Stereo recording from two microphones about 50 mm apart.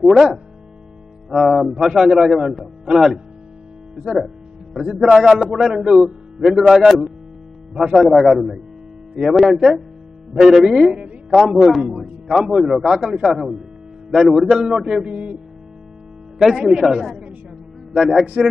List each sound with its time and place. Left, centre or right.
0.0 s a man's voice: centre
5.1 s a man's voice: centre
7.9 s a man's voice: centre
13.0 s a man's voice: centre
13.3 s a man's voice: centre
15.0 s speech: right
16.3 s a man's voice: centre